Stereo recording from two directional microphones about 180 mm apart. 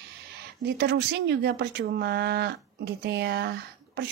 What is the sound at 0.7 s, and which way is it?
Speech, 65° right (ahead or behind).